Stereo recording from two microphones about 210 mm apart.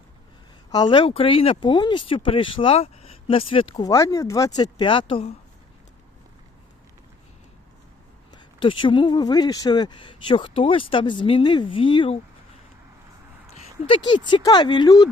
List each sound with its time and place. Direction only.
0.7 s speech: 20° left (ahead or behind)
8.5 s speech: 25° left (ahead or behind)
13.6 s speech: 25° left (ahead or behind)